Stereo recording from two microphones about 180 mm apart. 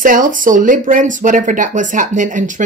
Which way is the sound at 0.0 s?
50° right (ahead or behind).